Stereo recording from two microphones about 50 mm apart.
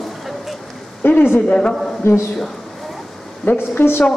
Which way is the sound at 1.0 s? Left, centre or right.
Left.